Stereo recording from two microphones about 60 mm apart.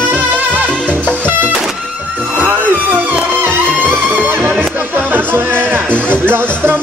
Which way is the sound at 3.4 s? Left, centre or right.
Right.